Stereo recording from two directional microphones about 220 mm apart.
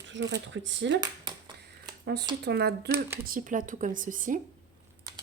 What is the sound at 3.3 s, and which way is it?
A woman's voice, 35° right (ahead or behind).